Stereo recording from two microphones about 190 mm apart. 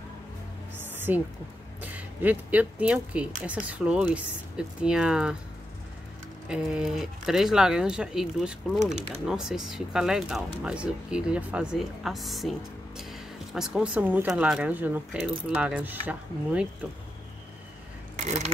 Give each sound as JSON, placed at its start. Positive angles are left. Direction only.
{"t": 1.1, "sound": "speech", "side_deg": -10}
{"t": 6.5, "sound": "speech", "side_deg": -5}
{"t": 18.1, "sound": "a sound", "side_deg": -40}